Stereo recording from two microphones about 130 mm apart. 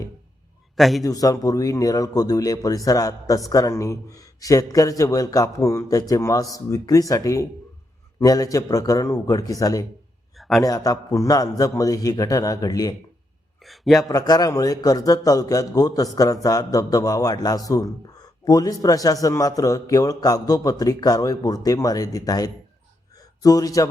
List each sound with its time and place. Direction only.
0.8 s a man's voice: centre (ahead or behind)
1.0 s speech: 25° left (ahead or behind)
10.3 s a sound: centre (ahead or behind)
10.6 s speech: 25° left (ahead or behind)
13.6 s speech: centre (ahead or behind)
14.1 s speech: 30° left (ahead or behind)
23.1 s a sound: 30° left (ahead or behind)